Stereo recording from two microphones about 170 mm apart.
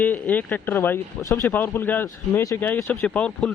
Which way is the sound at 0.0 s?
10° left (ahead or behind).